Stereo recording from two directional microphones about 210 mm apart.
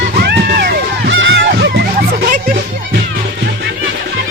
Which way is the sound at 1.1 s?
60° right (ahead or behind).